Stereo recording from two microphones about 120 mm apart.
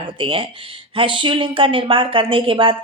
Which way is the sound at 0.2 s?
50° right (ahead or behind).